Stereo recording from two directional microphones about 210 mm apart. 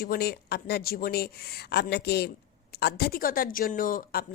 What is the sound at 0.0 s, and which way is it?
A woman's voice, 45° left (ahead or behind).